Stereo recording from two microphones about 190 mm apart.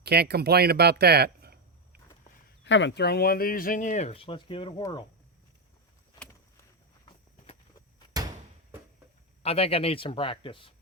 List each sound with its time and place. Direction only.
0.0 s speech: 60° right (ahead or behind)
2.6 s speech: 75° left (ahead or behind); by 5.0 s 25° left (ahead or behind)
9.4 s speech: 30° left (ahead or behind)